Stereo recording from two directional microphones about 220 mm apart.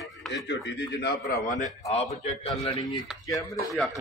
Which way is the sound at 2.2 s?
20° left (ahead or behind).